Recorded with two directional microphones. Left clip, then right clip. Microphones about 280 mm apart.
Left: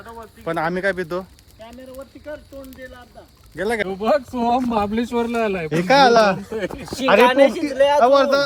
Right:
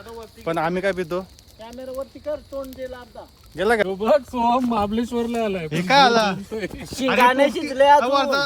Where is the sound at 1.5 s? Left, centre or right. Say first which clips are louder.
Right 5 dB; right.